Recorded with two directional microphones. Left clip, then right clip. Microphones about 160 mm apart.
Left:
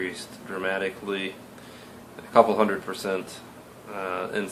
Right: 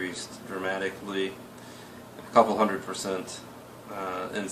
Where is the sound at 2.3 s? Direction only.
45° left (ahead or behind).